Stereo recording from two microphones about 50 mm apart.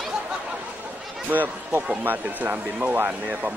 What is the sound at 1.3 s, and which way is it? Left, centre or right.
Speech, right.